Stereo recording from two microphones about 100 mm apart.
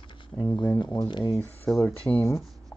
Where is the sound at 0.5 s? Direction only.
50° left (ahead or behind).